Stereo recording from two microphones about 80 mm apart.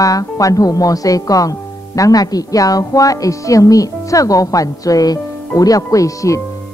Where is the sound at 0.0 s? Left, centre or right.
Left.